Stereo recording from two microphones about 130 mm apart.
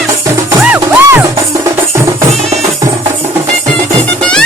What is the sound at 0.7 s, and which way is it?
Music, 15° right (ahead or behind).